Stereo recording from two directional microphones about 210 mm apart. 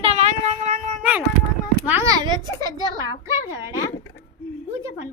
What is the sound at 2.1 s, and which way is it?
Speech, 20° right (ahead or behind).